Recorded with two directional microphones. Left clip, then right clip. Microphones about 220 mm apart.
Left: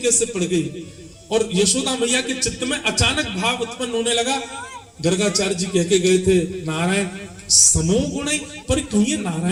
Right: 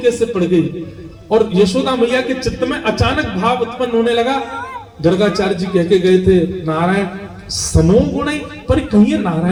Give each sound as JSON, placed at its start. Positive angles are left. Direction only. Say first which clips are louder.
{"t": 0.0, "sound": "a man's voice", "louder": "right 6 dB", "side_deg": 45}